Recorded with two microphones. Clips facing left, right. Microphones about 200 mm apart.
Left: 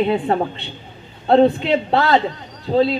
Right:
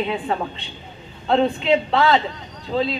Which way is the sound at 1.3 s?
40° left (ahead or behind).